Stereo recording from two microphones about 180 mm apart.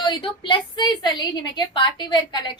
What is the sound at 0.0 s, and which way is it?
A woman's voice, 25° left (ahead or behind).